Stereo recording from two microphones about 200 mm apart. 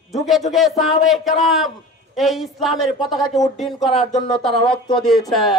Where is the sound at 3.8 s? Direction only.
30° left (ahead or behind).